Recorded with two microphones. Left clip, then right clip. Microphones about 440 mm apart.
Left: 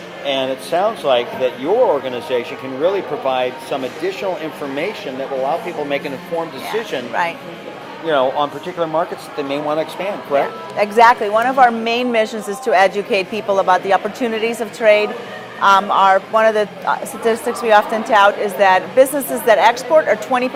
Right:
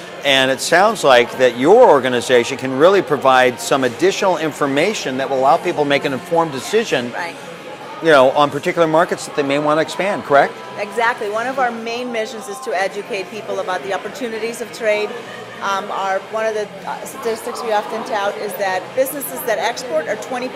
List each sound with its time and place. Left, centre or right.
0.3 s speech: right
8.0 s speech: right
10.8 s a woman's voice: left